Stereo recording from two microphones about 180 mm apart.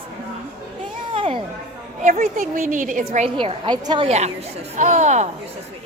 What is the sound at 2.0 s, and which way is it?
A woman's voice, 40° right (ahead or behind).